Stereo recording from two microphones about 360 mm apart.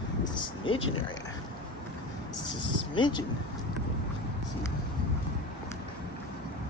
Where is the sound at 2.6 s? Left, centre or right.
Centre.